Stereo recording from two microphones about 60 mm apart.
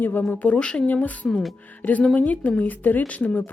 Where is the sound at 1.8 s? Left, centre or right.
Left.